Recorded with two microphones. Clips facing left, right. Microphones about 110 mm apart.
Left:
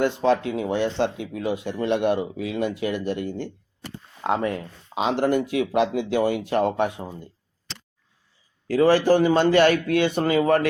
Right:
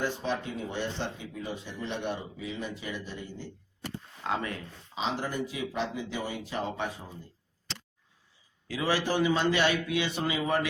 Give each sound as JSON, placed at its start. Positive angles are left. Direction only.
{"t": 0.0, "sound": "speech", "side_deg": 75}
{"t": 4.2, "sound": "speech", "side_deg": 60}
{"t": 8.6, "sound": "a man's voice", "side_deg": 50}